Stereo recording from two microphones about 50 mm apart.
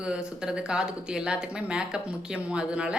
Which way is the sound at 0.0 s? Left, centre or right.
Centre.